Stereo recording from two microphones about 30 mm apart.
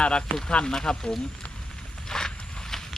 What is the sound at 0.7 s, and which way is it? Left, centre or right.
Speech, left.